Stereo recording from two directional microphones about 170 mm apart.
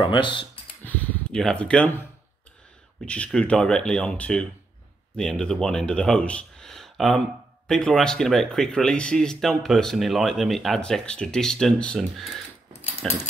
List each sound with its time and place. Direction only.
0.0 s speech: 30° left (ahead or behind)
0.8 s speech: 10° left (ahead or behind)
3.1 s speech: 5° left (ahead or behind)